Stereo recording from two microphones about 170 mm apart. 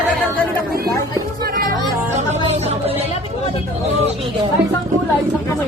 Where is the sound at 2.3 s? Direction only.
35° right (ahead or behind).